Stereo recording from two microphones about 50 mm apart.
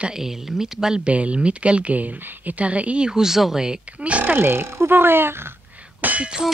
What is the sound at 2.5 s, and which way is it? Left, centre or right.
Speech, right.